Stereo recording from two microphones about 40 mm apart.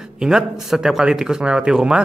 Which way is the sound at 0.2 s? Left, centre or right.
Centre.